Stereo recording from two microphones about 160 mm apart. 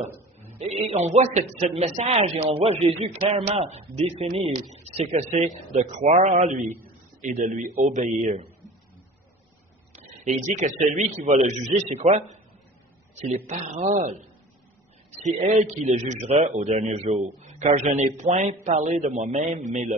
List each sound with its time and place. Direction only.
0.6 s a man's voice: 40° right (ahead or behind)
9.9 s a man's voice: 50° right (ahead or behind)
13.5 s a man's voice: 45° right (ahead or behind)
15.4 s a man's voice: 45° right (ahead or behind)